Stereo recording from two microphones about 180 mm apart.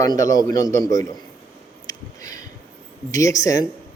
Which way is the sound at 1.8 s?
20° left (ahead or behind).